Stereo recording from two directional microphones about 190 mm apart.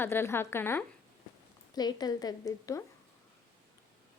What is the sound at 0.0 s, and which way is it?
A woman's voice, 10° left (ahead or behind).